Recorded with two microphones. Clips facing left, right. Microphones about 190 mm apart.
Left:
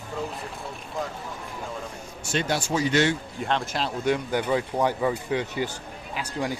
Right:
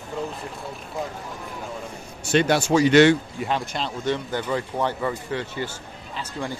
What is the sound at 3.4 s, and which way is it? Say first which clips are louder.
Speech: left 1 dB; centre (ahead or behind).